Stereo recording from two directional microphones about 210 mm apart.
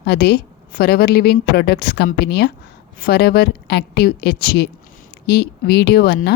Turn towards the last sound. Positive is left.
turn(degrees=50)  # may be behind; listen again after turning